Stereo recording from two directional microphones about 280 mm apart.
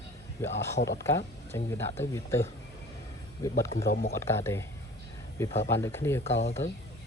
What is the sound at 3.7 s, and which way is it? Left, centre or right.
Speech, left.